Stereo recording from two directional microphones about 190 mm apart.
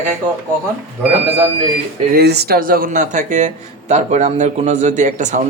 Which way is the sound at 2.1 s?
55° right (ahead or behind).